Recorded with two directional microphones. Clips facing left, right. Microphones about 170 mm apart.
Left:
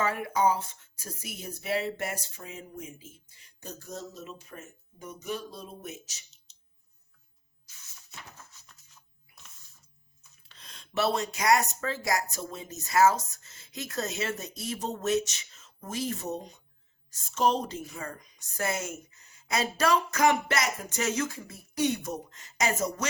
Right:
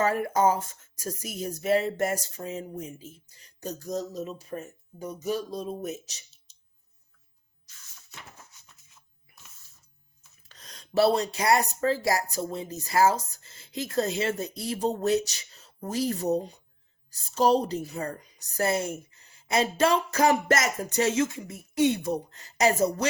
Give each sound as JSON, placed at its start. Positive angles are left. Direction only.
{"t": 0.0, "sound": "speech", "side_deg": -40}
{"t": 10.4, "sound": "speech", "side_deg": -40}
{"t": 21.0, "sound": "a woman's voice", "side_deg": -25}